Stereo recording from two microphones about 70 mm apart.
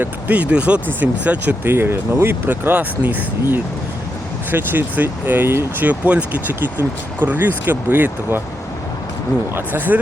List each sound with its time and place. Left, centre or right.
0.0 s speech: right
1.7 s speech: right
5.8 s speech: right
9.6 s speech: right